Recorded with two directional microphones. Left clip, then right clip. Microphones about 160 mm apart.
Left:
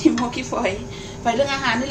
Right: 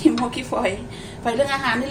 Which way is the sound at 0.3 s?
15° right (ahead or behind).